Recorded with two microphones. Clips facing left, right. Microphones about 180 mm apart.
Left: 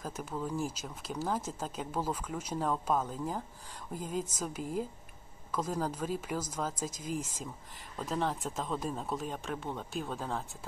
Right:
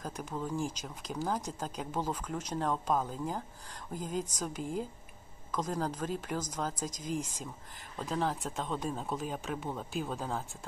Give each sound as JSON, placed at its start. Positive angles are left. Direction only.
{"t": 0.0, "sound": "speech", "side_deg": 5}